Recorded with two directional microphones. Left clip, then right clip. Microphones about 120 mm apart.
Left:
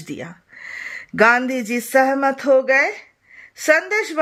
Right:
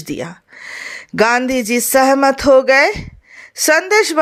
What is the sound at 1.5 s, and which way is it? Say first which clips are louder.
Speech: right 5 dB; 20° right (ahead or behind).